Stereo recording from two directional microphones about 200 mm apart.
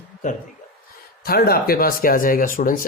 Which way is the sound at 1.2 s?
50° left (ahead or behind).